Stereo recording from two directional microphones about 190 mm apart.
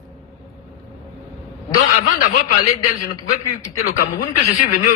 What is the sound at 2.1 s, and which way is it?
A man's voice, 45° left (ahead or behind).